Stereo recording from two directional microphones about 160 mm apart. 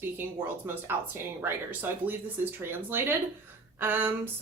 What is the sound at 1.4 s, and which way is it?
A woman's voice, 15° right (ahead or behind).